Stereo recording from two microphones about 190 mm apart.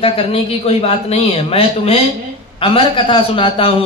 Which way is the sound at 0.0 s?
30° left (ahead or behind).